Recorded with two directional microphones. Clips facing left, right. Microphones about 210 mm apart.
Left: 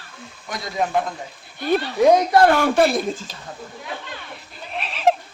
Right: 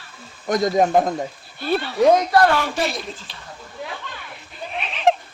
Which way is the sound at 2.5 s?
50° left (ahead or behind).